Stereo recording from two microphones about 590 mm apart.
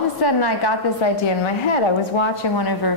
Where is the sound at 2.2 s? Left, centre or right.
Left.